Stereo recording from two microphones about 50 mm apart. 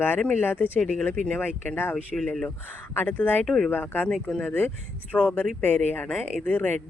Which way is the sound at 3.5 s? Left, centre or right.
Centre.